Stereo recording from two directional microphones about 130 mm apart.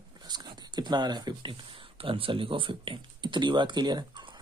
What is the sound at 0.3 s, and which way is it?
Speech, 35° right (ahead or behind).